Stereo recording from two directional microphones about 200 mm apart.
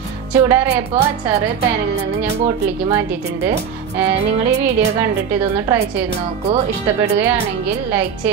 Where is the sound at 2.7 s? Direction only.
10° right (ahead or behind).